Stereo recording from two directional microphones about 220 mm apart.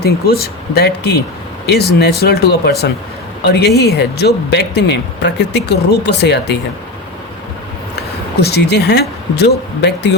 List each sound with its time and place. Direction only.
0.0 s speech: 45° left (ahead or behind)
8.4 s speech: 45° left (ahead or behind)